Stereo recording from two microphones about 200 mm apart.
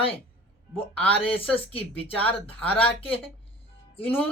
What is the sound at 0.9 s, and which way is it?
Speech, 30° left (ahead or behind).